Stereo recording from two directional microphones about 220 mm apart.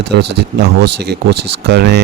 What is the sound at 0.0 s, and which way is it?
Speech, 50° right (ahead or behind).